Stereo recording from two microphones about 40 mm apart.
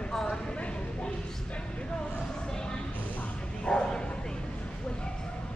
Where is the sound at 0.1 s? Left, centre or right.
Centre.